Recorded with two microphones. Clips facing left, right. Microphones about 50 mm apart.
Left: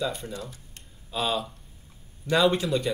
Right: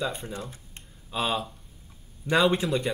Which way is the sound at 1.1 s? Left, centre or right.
Centre.